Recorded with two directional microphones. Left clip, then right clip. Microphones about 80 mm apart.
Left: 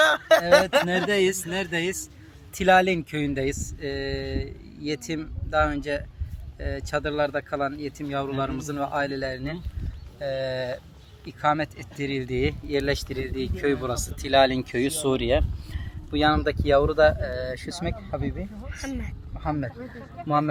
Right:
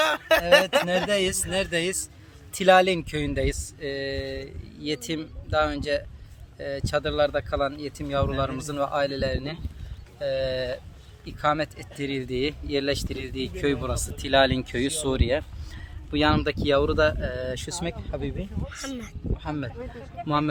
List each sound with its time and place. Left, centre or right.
0.0 s a sound: centre
0.4 s speech: centre
0.7 s speech: centre
3.8 s speech: right
4.9 s speech: right; by 14.8 s centre
14.8 s speech: centre
16.1 s speech: right
18.7 s speech: right